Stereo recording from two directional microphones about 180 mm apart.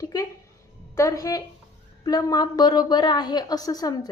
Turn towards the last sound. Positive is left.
turn(degrees=20)  # may be behind; listen again after turning